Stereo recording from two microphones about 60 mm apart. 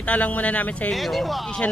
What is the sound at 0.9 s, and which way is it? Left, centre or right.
Speech, centre.